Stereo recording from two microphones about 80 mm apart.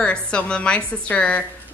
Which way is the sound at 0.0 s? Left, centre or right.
Centre.